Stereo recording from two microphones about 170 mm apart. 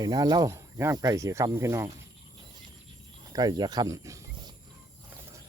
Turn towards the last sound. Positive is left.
turn(degrees=-20)  # may be behind; listen again after turning